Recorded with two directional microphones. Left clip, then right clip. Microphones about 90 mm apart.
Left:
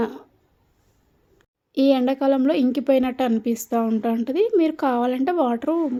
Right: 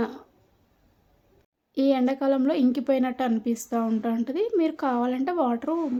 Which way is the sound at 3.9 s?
35° left (ahead or behind).